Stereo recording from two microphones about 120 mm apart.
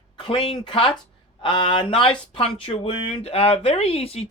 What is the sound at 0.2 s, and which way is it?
Speech, 45° left (ahead or behind).